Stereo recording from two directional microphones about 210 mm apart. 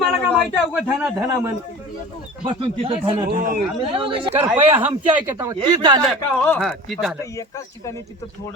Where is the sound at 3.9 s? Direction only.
25° right (ahead or behind).